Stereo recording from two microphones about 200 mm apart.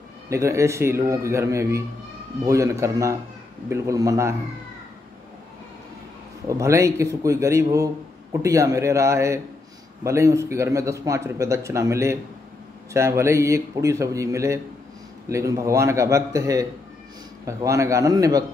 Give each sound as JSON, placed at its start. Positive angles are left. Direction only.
{"t": 0.3, "sound": "a man's voice", "side_deg": -15}
{"t": 6.4, "sound": "a man's voice", "side_deg": -15}